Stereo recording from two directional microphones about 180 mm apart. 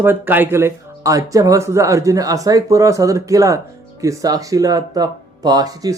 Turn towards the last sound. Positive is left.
turn(degrees=-20)  # may be behind; listen again after turning